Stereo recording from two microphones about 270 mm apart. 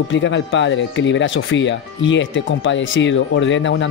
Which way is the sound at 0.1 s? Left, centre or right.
Left.